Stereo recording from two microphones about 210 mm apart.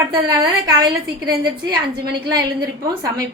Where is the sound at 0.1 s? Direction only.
20° right (ahead or behind).